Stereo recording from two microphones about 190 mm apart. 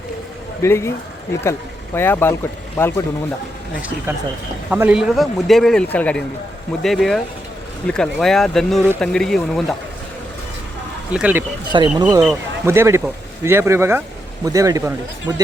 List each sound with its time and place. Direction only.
0.6 s speech: 15° left (ahead or behind)
2.0 s speech: 10° left (ahead or behind)
3.8 s a man's voice: 10° right (ahead or behind)
11.1 s speech: 5° right (ahead or behind)
11.7 s speech: 25° right (ahead or behind)
12.6 s speech: 15° right (ahead or behind)